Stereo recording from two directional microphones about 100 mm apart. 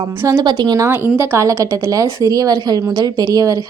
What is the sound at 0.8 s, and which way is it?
A woman's voice, 25° right (ahead or behind).